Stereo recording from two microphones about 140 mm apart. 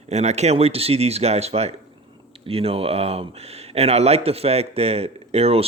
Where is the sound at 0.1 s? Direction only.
50° right (ahead or behind).